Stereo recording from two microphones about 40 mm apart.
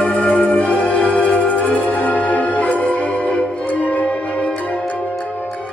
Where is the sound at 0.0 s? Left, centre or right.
Left.